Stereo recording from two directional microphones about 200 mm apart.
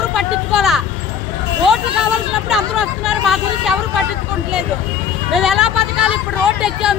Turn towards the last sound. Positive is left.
turn(degrees=-5)  # may be behind; listen again after turning